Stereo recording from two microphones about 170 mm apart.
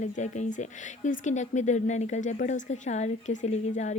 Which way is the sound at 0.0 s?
45° left (ahead or behind).